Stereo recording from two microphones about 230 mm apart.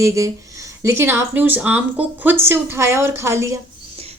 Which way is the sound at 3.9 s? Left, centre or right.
Right.